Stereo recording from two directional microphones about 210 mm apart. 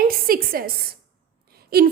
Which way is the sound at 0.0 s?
45° right (ahead or behind).